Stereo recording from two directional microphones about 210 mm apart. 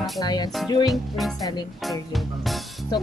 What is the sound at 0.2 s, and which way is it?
Speech, 20° left (ahead or behind).